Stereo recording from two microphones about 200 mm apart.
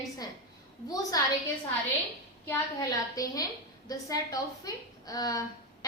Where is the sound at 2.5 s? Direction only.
15° left (ahead or behind).